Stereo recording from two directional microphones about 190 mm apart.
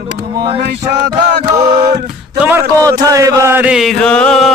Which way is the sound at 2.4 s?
10° right (ahead or behind).